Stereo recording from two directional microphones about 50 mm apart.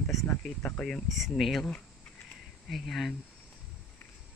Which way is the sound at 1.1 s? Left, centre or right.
Centre.